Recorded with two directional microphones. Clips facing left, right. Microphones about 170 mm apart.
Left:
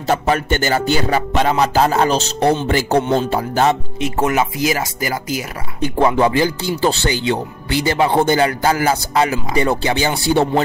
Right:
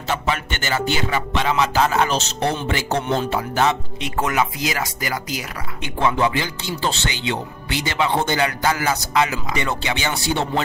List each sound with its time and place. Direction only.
0.0 s speech: 40° left (ahead or behind)
4.0 s speech: 25° left (ahead or behind)